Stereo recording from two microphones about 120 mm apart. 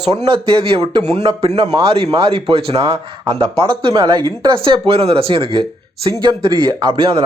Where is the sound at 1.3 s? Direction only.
55° right (ahead or behind).